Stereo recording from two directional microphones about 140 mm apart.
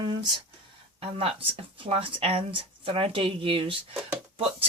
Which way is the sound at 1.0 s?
40° right (ahead or behind).